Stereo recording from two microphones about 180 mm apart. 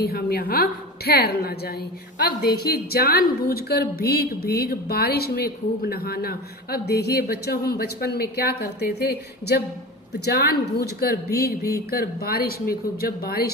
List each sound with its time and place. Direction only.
0.0 s a woman's voice: 60° left (ahead or behind)
10.2 s a woman's voice: 65° left (ahead or behind)